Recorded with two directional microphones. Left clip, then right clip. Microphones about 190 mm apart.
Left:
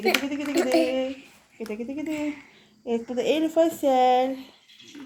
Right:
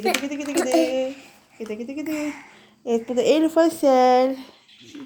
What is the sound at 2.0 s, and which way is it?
Speech, 35° right (ahead or behind).